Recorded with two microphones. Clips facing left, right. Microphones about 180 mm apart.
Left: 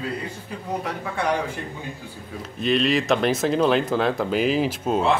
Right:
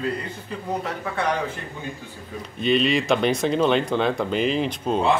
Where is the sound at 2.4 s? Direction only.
Centre (ahead or behind).